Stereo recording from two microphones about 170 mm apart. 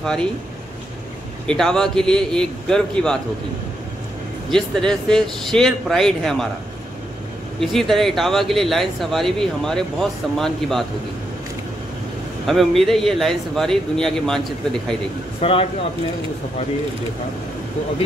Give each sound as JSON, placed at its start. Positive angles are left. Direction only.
{"t": 0.0, "sound": "speech", "side_deg": 5}
{"t": 1.5, "sound": "speech", "side_deg": 5}
{"t": 4.5, "sound": "speech", "side_deg": 5}
{"t": 7.6, "sound": "speech", "side_deg": 0}
{"t": 12.4, "sound": "speech", "side_deg": 0}
{"t": 15.4, "sound": "speech", "side_deg": 35}